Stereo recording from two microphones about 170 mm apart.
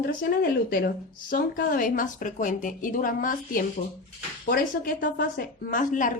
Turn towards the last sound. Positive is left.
turn(degrees=50)  # may be behind; listen again after turning